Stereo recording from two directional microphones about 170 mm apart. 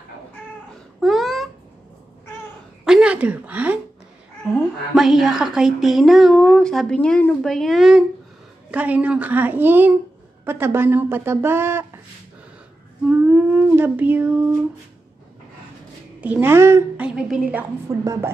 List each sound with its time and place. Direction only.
1.0 s babbling: centre (ahead or behind)
2.8 s a sound: 5° right (ahead or behind)
4.9 s a woman's voice: centre (ahead or behind)
13.3 s a sound: 10° right (ahead or behind)
16.2 s a woman's voice: 10° right (ahead or behind)
18.0 s speech: 20° right (ahead or behind)